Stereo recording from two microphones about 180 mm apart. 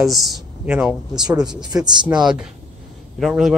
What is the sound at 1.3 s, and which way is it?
Speech, 20° right (ahead or behind).